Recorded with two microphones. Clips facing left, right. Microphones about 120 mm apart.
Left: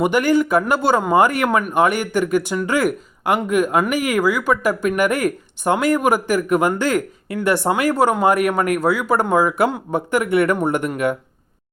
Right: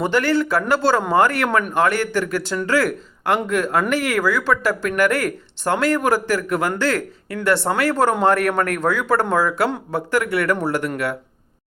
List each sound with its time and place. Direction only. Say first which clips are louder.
0.0 s speech: left 2 dB; 15° left (ahead or behind)
1.5 s speech: left 1 dB; 5° left (ahead or behind)
1.7 s speech: left 1 dB; 15° left (ahead or behind)